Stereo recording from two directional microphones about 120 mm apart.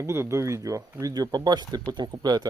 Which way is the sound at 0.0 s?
25° right (ahead or behind).